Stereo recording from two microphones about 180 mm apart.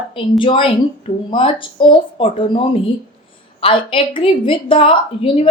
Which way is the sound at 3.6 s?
30° left (ahead or behind).